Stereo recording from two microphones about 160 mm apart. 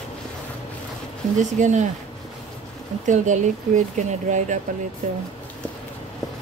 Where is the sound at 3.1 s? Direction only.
50° right (ahead or behind).